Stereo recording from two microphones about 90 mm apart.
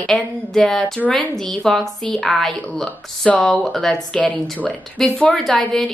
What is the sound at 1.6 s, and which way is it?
Speech, 5° left (ahead or behind).